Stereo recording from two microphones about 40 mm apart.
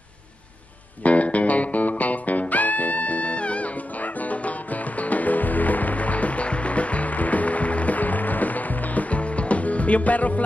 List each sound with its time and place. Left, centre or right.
1.0 s music: left